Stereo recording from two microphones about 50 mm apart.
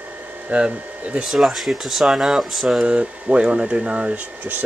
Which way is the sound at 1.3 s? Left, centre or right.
Centre.